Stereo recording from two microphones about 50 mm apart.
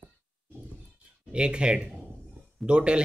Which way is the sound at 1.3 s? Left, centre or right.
Centre.